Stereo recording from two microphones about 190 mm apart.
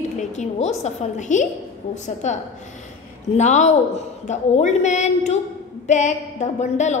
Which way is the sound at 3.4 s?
40° left (ahead or behind).